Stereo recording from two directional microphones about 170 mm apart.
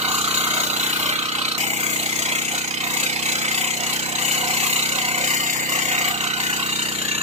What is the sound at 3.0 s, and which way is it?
Vehicle, 40° right (ahead or behind).